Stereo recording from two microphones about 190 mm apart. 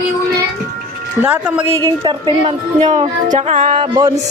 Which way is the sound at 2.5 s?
35° right (ahead or behind).